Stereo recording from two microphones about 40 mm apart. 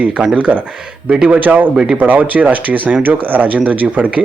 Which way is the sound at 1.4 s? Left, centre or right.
Right.